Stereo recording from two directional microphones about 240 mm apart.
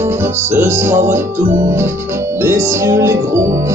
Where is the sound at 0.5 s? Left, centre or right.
Centre.